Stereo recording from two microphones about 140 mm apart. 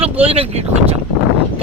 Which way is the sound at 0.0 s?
45° right (ahead or behind).